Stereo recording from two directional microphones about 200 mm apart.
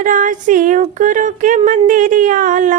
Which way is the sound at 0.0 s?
40° right (ahead or behind).